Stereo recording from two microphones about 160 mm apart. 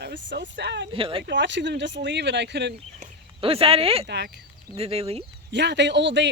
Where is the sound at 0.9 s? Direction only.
35° right (ahead or behind).